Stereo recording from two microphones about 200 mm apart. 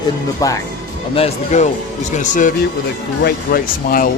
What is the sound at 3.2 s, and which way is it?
Speech, 50° left (ahead or behind).